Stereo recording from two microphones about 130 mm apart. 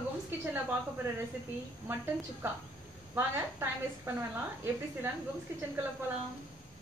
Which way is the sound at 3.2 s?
20° right (ahead or behind).